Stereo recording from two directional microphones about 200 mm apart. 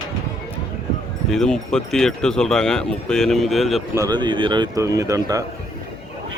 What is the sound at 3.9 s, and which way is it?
Speech, 20° right (ahead or behind).